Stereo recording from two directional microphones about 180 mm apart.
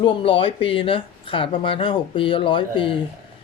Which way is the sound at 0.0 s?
30° left (ahead or behind).